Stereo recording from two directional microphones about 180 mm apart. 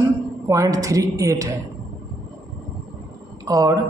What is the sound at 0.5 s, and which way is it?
A woman's voice, 20° right (ahead or behind).